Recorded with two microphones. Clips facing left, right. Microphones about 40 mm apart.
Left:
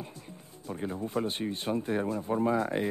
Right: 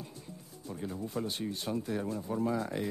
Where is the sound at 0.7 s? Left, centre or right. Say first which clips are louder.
Left 4 dB; left.